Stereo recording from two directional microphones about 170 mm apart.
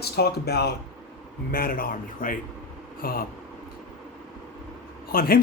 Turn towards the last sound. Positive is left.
turn(degrees=60)  # may be behind; listen again after turning